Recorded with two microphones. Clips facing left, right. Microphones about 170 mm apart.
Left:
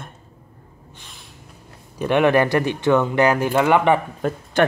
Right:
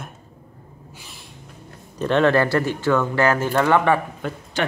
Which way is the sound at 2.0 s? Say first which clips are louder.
Left 1 dB; 15° left (ahead or behind).